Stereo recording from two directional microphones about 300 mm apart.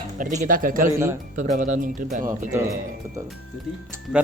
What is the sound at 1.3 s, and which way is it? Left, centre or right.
Speech, right.